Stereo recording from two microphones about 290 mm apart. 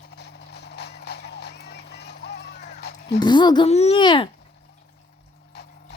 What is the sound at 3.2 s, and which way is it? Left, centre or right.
A child's voice, centre.